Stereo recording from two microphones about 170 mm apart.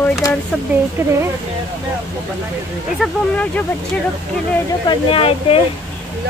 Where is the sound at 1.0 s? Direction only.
20° right (ahead or behind).